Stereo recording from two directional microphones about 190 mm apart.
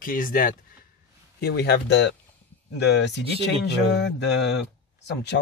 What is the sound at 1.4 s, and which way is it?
Speech, 60° left (ahead or behind).